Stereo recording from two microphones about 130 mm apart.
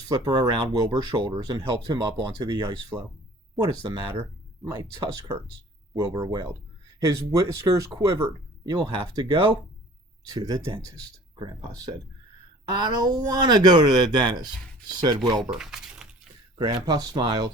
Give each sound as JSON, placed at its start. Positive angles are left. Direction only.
{"t": 0.1, "sound": "speech", "side_deg": -30}
{"t": 8.7, "sound": "speech", "side_deg": -35}
{"t": 15.4, "sound": "speech", "side_deg": -5}
{"t": 16.8, "sound": "speech", "side_deg": -35}